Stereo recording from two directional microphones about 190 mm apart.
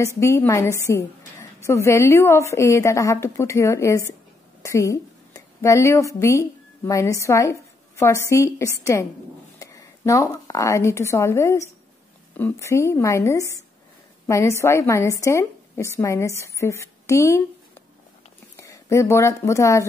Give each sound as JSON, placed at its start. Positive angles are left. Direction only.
{"t": 0.0, "sound": "a woman's voice", "side_deg": 15}
{"t": 18.6, "sound": "speech", "side_deg": 15}